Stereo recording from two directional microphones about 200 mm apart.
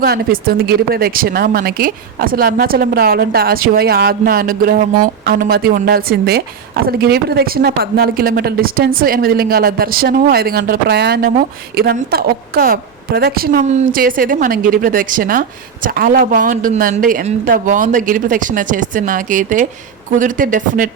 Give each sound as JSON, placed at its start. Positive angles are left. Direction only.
{"t": 0.0, "sound": "a woman's voice", "side_deg": -50}